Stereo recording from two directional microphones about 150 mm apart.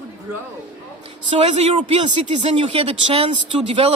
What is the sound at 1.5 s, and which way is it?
A man's voice, 45° right (ahead or behind).